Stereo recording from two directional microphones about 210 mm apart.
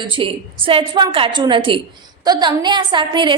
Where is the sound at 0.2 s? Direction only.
25° right (ahead or behind).